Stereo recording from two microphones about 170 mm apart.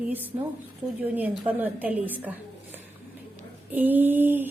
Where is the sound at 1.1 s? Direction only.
10° right (ahead or behind).